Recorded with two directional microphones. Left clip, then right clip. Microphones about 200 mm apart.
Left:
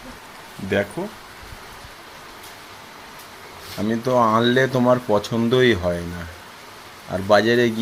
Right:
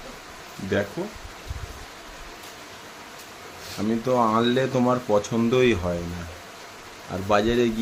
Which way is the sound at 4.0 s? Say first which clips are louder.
Left 4 dB; 10° left (ahead or behind).